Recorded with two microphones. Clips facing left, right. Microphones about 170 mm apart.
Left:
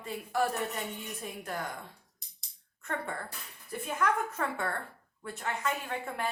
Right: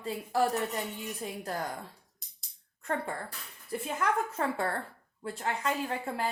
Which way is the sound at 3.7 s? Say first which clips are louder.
Even; 30° right (ahead or behind).